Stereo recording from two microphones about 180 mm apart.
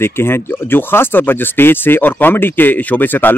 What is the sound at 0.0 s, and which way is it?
Speech, 15° left (ahead or behind).